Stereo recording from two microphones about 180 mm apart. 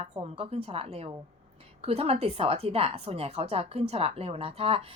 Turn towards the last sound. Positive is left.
turn(degrees=-35)  # may be behind; listen again after turning